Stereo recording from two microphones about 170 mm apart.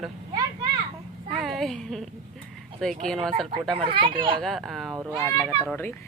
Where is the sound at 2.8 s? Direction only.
5° left (ahead or behind).